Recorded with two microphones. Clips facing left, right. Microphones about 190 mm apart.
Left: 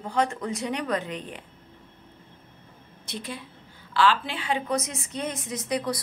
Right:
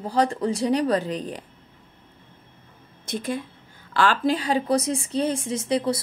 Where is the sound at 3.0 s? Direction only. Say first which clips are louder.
Right 8 dB; 45° right (ahead or behind).